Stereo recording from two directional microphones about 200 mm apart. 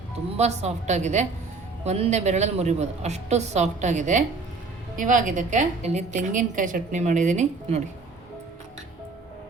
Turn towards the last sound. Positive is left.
turn(degrees=-35)  # may be behind; listen again after turning